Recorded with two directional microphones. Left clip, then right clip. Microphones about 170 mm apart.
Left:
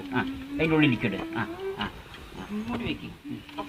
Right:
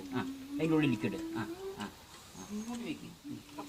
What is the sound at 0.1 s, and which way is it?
Speech, 25° left (ahead or behind).